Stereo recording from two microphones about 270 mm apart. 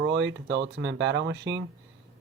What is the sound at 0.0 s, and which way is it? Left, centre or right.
Speech, right.